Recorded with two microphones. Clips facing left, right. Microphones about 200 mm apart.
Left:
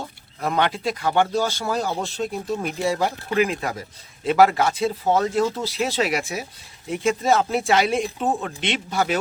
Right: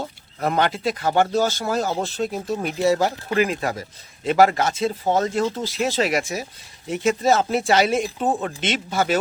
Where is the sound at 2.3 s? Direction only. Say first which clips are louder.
Right 1 dB; centre (ahead or behind).